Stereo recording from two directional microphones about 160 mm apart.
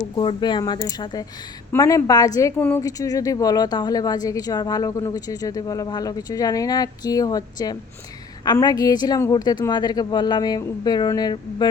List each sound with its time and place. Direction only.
0.2 s a woman's voice: 30° left (ahead or behind)
2.6 s speech: 10° left (ahead or behind)
2.8 s a woman's voice: 20° left (ahead or behind)